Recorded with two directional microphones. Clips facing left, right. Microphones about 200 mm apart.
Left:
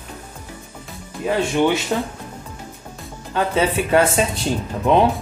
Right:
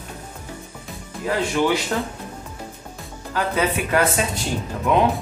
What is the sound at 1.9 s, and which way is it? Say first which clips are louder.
Speech: left 2 dB; 15° left (ahead or behind).